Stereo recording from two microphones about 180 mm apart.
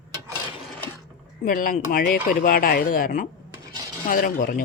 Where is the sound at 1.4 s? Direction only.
50° left (ahead or behind).